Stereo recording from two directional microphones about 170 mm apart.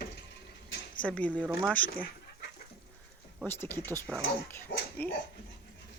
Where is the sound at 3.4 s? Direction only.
10° left (ahead or behind).